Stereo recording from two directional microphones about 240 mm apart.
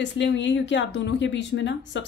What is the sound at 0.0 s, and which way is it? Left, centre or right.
A woman's voice, left.